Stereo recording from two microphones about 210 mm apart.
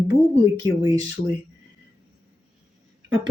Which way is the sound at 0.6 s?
20° right (ahead or behind).